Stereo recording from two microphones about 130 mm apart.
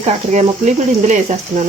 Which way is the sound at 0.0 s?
65° right (ahead or behind).